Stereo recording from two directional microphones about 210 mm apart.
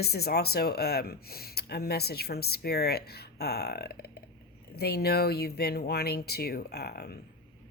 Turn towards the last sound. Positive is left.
turn(degrees=50)  # may be behind; listen again after turning